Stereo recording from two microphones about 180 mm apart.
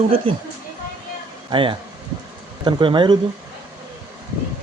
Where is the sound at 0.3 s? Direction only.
30° right (ahead or behind).